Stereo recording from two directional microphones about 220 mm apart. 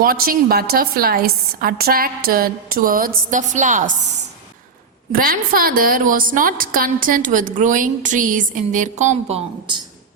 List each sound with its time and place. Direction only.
0.0 s a woman's voice: 40° right (ahead or behind)
5.1 s a woman's voice: 40° right (ahead or behind); by 9.8 s 25° right (ahead or behind)